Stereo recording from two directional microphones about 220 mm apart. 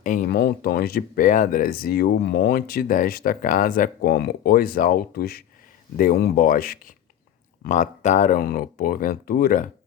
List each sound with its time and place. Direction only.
0.0 s speech: 40° left (ahead or behind)